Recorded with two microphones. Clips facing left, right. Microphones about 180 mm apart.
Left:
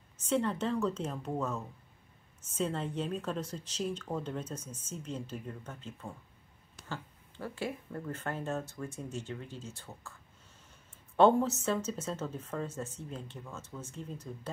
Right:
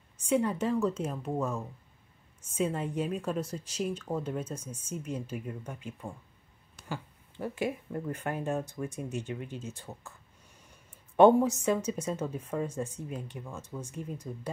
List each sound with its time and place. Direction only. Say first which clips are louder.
0.2 s speech: right 3 dB; 10° right (ahead or behind)